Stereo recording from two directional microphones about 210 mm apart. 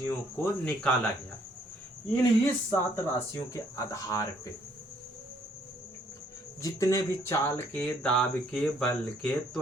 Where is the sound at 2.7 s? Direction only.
15° left (ahead or behind).